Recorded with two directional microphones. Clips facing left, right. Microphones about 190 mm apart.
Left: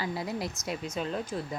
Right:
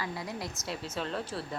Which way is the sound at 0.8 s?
10° left (ahead or behind).